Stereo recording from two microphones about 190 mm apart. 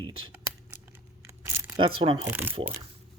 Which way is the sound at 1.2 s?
15° right (ahead or behind).